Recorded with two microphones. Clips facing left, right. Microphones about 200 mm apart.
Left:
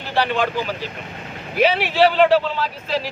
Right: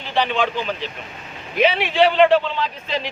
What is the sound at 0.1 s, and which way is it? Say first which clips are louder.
A man's voice: even; 10° left (ahead or behind).